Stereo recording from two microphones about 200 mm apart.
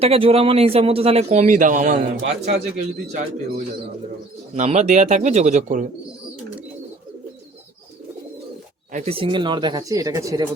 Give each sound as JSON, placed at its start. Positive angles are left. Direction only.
{"t": 0.0, "sound": "a man's voice", "side_deg": -30}
{"t": 4.5, "sound": "a man's voice", "side_deg": -35}
{"t": 8.9, "sound": "speech", "side_deg": -40}
{"t": 9.1, "sound": "speech", "side_deg": -25}